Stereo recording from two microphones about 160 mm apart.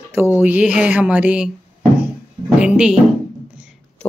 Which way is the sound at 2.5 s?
5° right (ahead or behind).